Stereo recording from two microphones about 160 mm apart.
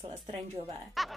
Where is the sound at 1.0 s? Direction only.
Centre (ahead or behind).